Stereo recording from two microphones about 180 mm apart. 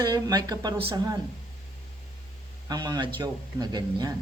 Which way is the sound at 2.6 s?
20° right (ahead or behind).